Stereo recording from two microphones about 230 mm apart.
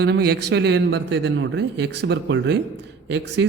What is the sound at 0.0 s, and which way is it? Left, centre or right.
A man's voice, right.